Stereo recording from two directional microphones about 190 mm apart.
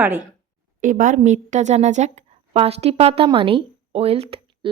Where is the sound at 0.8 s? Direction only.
45° right (ahead or behind).